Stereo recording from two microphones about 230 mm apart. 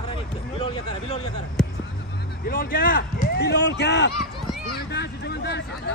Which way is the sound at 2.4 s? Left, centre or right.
Left.